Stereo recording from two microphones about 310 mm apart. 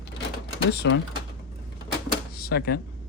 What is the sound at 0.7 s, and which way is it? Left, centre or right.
Speech, left.